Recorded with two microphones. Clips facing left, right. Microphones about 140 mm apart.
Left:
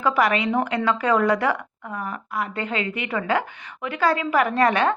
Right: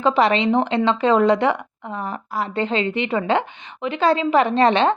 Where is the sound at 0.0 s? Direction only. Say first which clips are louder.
Right 4 dB; 25° right (ahead or behind).